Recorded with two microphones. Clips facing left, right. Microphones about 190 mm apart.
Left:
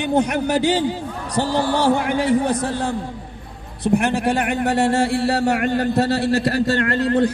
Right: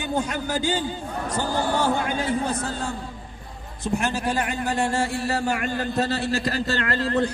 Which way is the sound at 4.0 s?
65° left (ahead or behind).